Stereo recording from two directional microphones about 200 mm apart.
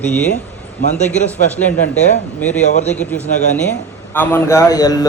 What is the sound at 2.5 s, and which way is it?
Speech, 35° left (ahead or behind).